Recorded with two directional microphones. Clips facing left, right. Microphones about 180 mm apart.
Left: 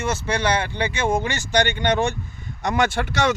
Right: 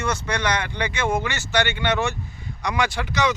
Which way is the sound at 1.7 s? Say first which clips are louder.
Left 2 dB; 40° left (ahead or behind).